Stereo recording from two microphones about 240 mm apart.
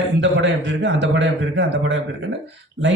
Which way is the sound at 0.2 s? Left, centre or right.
Right.